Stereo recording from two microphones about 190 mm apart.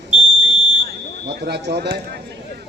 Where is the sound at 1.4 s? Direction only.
60° right (ahead or behind).